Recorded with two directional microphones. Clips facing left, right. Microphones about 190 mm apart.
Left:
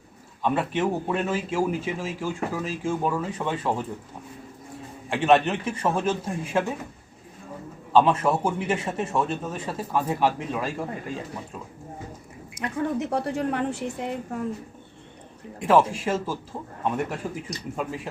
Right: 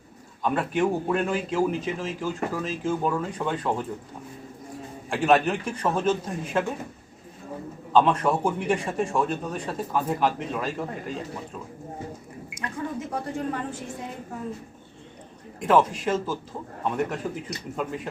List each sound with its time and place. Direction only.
0.4 s a man's voice: centre (ahead or behind)
5.0 s a man's voice: centre (ahead or behind)
7.9 s a man's voice: 5° left (ahead or behind)
12.5 s speech: 65° left (ahead or behind)
15.6 s a man's voice: 5° left (ahead or behind)